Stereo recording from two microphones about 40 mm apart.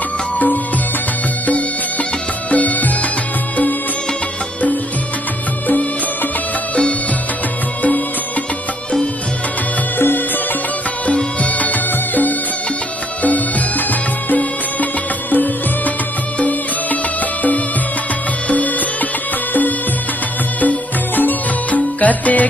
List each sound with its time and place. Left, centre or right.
2.5 s music: left
9.9 s music: left
11.1 s music: left
15.3 s music: left
20.6 s music: left